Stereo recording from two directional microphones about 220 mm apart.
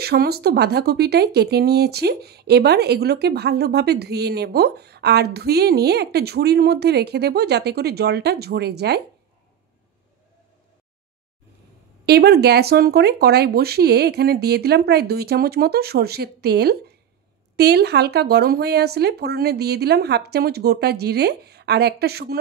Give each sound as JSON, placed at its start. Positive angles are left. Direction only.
{"t": 0.0, "sound": "speech", "side_deg": -45}
{"t": 12.1, "sound": "speech", "side_deg": -45}